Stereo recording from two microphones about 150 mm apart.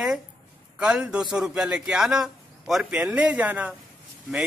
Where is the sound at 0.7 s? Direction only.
5° right (ahead or behind).